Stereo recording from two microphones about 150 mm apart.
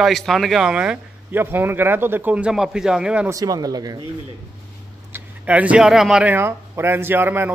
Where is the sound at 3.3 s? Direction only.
25° right (ahead or behind).